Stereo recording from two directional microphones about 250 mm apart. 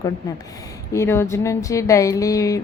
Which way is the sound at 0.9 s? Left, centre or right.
Centre.